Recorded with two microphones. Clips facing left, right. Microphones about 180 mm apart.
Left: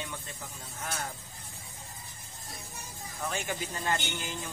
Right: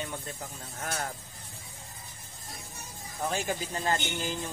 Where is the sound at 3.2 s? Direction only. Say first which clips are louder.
Right 3 dB; 35° right (ahead or behind).